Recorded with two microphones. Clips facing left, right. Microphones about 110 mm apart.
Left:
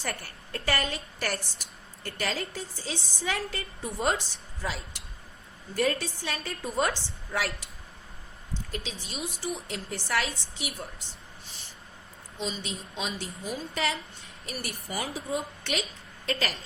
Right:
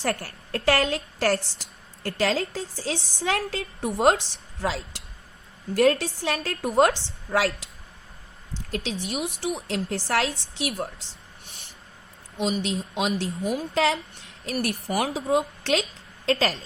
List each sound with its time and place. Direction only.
0.0 s a woman's voice: 80° right
8.7 s a woman's voice: 75° right (ahead or behind)
11.4 s a sound: 60° right (ahead or behind)
12.4 s a woman's voice: 70° right (ahead or behind); by 14.7 s 90° right
14.8 s a woman's voice: 75° right (ahead or behind)